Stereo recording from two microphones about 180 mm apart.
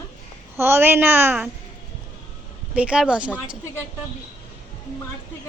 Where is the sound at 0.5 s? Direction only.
15° right (ahead or behind).